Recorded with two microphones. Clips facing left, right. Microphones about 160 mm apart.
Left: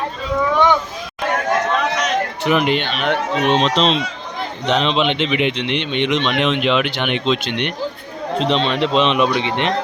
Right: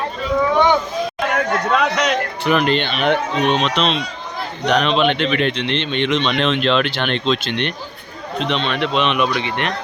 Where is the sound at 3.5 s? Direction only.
30° left (ahead or behind).